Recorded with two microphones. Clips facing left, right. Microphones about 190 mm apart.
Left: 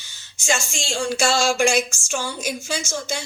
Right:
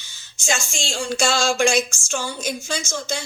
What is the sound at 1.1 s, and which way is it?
Speech, 5° left (ahead or behind).